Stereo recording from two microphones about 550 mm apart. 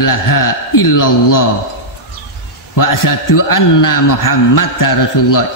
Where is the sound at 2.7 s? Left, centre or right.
Left.